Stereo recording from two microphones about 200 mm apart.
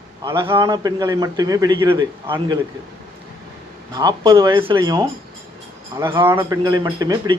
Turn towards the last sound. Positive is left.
turn(degrees=-20)  # may be behind; listen again after turning